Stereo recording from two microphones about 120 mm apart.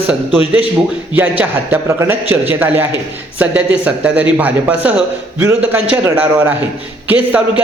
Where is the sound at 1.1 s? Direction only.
15° right (ahead or behind).